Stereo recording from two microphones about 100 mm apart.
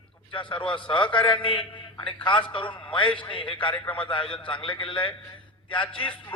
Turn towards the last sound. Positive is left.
turn(degrees=15)  # may be behind; listen again after turning